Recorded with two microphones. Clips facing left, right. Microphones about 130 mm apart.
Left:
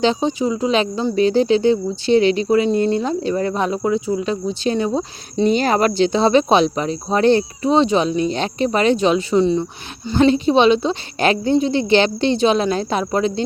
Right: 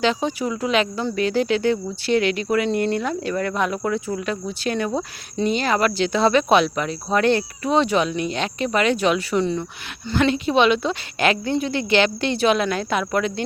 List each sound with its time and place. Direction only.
0.0 s speech: 25° left (ahead or behind)
5.5 s speech: 40° left (ahead or behind)
6.0 s speech: 25° left (ahead or behind)